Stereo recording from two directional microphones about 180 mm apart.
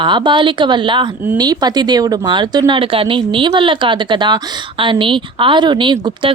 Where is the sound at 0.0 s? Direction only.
25° right (ahead or behind).